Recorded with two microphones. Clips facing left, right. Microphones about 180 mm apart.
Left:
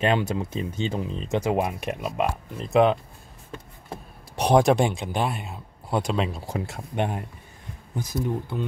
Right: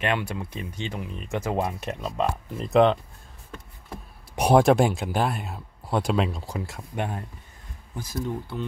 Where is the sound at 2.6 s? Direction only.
Centre (ahead or behind).